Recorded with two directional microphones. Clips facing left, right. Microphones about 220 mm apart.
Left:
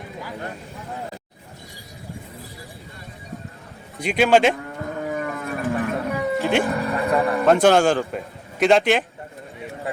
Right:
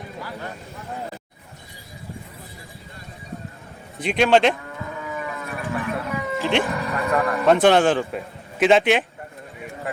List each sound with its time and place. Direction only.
4.0 s speech: centre (ahead or behind)
4.9 s a sound: 50° left (ahead or behind)
6.4 s speech: centre (ahead or behind)
6.7 s vehicle: 30° left (ahead or behind)
7.1 s a sound: 15° left (ahead or behind)
7.4 s speech: centre (ahead or behind)